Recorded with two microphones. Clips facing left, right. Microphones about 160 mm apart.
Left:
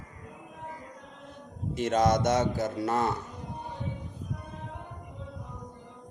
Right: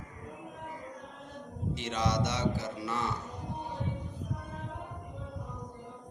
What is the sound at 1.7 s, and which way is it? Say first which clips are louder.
Speech: left 8 dB; 45° left (ahead or behind).